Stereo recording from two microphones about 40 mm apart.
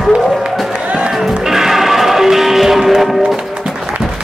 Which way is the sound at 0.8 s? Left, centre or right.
Right.